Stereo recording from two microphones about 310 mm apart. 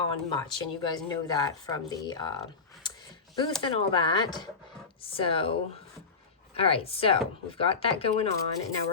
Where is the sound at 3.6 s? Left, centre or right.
Centre.